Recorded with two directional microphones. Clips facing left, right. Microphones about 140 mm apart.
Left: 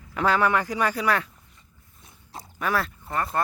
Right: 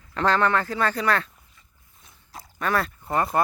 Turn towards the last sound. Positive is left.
turn(degrees=-20)  # may be behind; listen again after turning